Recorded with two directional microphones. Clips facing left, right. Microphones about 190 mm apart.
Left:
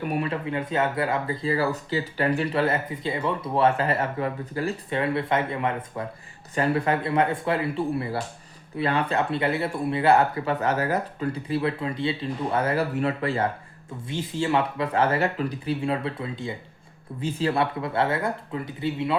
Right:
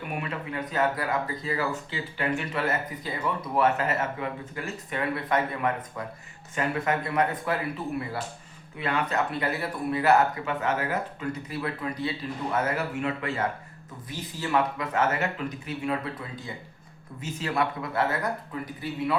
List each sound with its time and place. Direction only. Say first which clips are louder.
0.2 s speech: left 5 dB; 25° left (ahead or behind)